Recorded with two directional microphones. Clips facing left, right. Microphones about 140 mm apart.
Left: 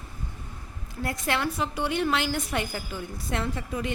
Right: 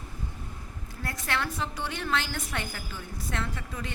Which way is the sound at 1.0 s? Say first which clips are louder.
Left 5 dB; 15° left (ahead or behind).